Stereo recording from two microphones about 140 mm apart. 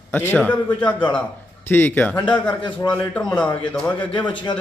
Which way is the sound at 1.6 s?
15° left (ahead or behind).